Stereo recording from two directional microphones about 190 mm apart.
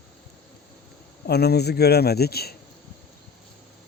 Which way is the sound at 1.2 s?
60° left (ahead or behind).